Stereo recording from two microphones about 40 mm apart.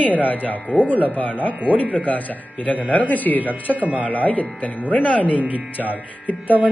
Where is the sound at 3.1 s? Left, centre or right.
Left.